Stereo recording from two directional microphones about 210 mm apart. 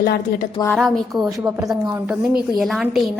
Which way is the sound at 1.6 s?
15° right (ahead or behind).